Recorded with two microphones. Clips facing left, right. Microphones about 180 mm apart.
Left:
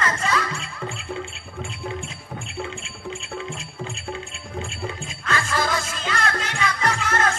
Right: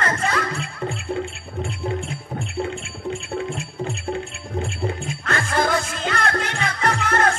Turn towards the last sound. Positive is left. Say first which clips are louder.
# right 3 dB
turn(degrees=-55)  # may be behind; listen again after turning